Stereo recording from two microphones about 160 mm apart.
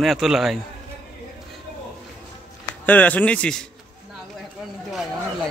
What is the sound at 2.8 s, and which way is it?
Speech, 10° left (ahead or behind).